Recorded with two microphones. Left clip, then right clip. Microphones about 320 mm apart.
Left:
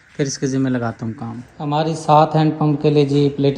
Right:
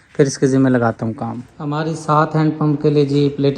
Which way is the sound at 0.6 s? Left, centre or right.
Right.